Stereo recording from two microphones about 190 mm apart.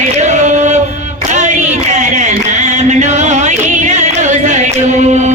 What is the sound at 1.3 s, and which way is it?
Singing, 40° right (ahead or behind).